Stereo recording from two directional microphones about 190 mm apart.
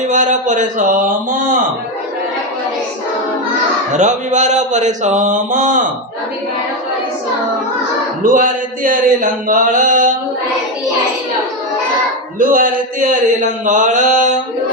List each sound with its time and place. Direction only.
0.1 s speech: 40° right (ahead or behind)
3.9 s speech: 40° right (ahead or behind)
8.2 s speech: 45° right (ahead or behind)
12.4 s speech: 45° right (ahead or behind)